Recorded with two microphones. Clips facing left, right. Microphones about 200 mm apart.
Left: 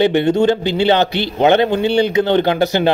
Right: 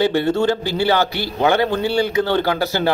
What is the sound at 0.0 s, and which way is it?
A man's voice, 20° left (ahead or behind).